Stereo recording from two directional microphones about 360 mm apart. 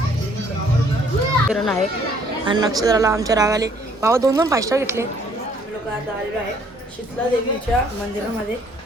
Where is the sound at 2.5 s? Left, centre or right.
Centre.